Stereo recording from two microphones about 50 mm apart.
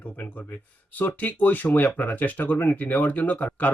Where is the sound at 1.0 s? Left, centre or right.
Left.